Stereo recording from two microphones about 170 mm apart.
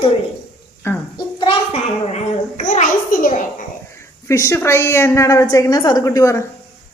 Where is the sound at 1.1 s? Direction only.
30° left (ahead or behind); by 3.4 s 55° left (ahead or behind).